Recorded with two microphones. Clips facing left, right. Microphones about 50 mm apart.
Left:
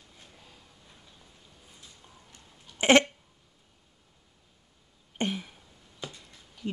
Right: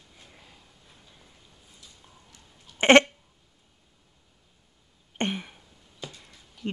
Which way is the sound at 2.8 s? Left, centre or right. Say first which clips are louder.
Right 4 dB; right.